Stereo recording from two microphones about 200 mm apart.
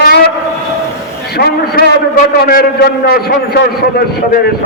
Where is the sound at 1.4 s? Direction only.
50° left (ahead or behind).